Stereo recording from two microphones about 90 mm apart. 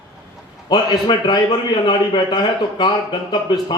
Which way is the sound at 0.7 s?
50° left (ahead or behind).